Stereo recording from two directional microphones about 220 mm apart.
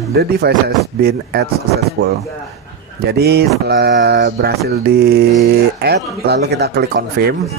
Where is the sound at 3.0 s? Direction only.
45° right (ahead or behind).